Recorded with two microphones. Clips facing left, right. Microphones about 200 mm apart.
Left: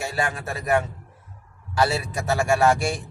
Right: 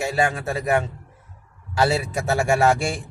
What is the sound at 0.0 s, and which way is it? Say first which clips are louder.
Speech: right 5 dB; 25° right (ahead or behind).